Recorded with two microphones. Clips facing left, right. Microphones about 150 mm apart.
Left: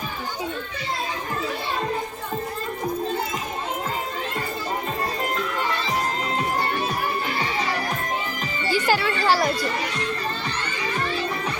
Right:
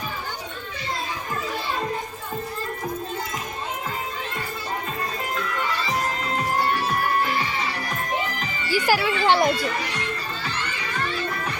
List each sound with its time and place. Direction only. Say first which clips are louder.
8.7 s music: right 1 dB; 10° right (ahead or behind)
9.2 s children playing: right 2 dB; 20° right (ahead or behind)